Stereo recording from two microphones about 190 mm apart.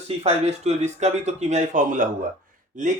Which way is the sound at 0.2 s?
35° right (ahead or behind).